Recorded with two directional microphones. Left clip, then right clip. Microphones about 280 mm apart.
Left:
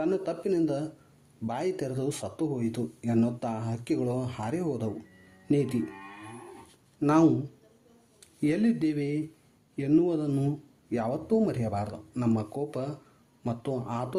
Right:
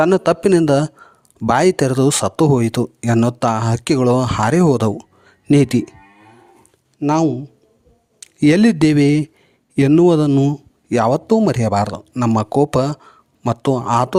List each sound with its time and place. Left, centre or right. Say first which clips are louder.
0.0 s speech: right 16 dB; right
7.0 s a man's voice: right 6 dB; right
8.2 s speech: right 15 dB; right